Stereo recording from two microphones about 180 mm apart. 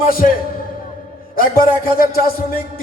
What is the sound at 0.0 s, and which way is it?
Speech, 55° left (ahead or behind).